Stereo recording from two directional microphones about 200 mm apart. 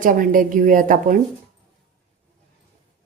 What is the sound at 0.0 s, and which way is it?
A woman's voice, 45° right (ahead or behind).